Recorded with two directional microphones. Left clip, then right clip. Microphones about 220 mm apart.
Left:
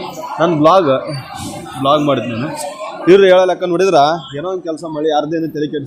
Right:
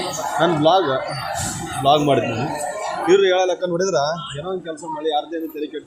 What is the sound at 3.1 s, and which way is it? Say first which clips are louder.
A man's voice: left 8 dB; 40° left (ahead or behind).